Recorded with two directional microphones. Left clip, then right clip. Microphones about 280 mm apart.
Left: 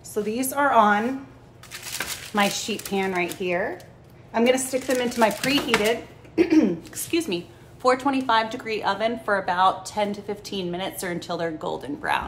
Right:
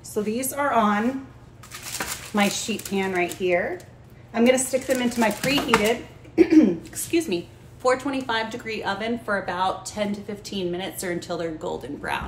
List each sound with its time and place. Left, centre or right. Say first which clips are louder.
0.1 s a woman's voice: left 1 dB; centre
2.3 s a woman's voice: left 1 dB; centre